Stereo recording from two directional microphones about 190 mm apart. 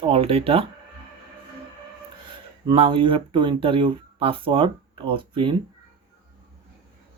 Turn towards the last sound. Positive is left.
turn(degrees=-25)  # may be behind; listen again after turning